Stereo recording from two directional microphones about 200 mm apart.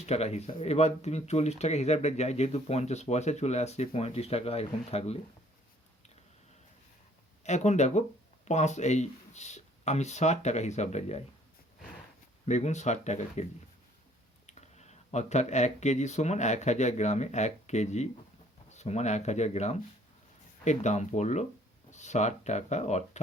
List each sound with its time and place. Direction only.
0.0 s speech: 35° left (ahead or behind)
7.4 s speech: 35° left (ahead or behind)
12.5 s speech: 35° left (ahead or behind)
14.4 s speech: 35° left (ahead or behind)